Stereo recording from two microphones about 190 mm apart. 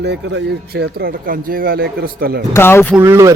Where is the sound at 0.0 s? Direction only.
70° right (ahead or behind); by 2.4 s 50° right (ahead or behind).